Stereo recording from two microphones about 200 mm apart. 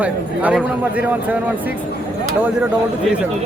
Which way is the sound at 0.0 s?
5° right (ahead or behind).